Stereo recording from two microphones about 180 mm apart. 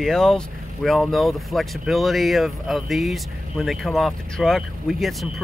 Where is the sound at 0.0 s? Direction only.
Centre (ahead or behind).